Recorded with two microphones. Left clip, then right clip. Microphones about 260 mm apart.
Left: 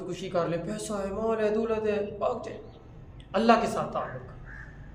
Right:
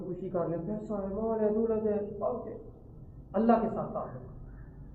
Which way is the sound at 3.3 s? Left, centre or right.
Left.